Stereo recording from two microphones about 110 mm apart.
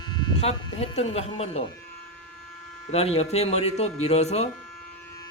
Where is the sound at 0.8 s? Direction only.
75° left (ahead or behind).